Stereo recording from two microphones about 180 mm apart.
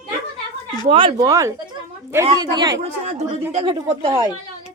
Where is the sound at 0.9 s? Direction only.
30° right (ahead or behind).